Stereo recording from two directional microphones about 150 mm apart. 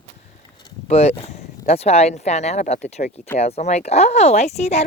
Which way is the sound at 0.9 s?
45° left (ahead or behind).